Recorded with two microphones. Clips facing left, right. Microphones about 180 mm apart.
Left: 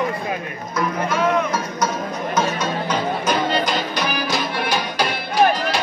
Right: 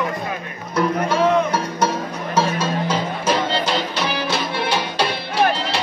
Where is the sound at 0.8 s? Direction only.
30° right (ahead or behind).